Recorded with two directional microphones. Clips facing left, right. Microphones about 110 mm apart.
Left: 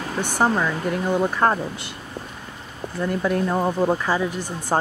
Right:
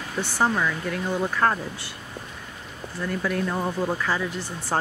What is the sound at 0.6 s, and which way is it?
Speech, 25° left (ahead or behind).